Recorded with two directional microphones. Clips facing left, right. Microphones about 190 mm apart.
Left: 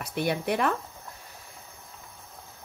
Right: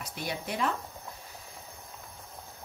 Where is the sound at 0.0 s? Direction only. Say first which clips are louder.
Left 8 dB; 60° left (ahead or behind).